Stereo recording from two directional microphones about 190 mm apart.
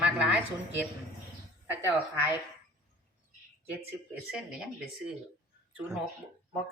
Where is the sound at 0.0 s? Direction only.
5° right (ahead or behind).